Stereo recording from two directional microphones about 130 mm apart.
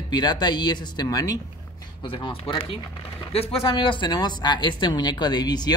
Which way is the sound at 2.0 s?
40° left (ahead or behind).